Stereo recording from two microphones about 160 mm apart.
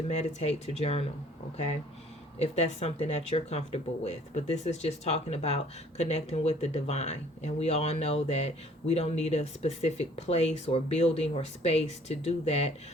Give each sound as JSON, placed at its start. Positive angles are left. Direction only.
{"t": 0.1, "sound": "speech", "side_deg": 45}
{"t": 2.4, "sound": "speech", "side_deg": 45}